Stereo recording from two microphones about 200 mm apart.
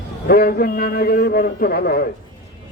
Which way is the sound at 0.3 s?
50° left (ahead or behind).